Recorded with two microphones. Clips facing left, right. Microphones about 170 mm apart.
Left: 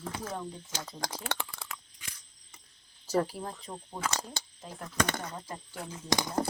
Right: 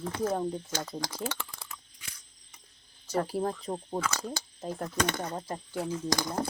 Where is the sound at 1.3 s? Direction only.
70° left (ahead or behind).